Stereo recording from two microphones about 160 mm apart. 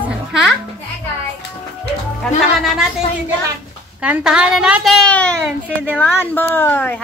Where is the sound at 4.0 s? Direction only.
5° right (ahead or behind); by 7.0 s 15° left (ahead or behind).